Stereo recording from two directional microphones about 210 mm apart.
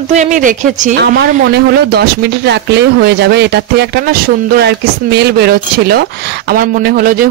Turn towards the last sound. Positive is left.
turn(degrees=-45)  # may be behind; listen again after turning